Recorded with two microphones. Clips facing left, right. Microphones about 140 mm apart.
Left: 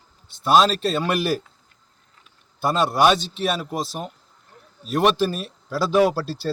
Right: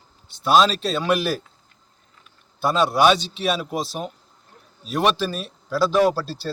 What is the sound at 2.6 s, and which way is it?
Speech, 5° left (ahead or behind).